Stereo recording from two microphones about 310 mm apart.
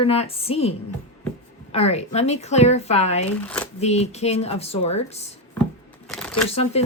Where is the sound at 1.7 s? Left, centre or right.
Centre.